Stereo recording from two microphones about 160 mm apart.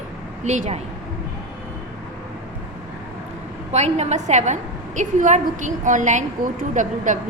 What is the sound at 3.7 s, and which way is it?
A woman's voice, 45° right (ahead or behind).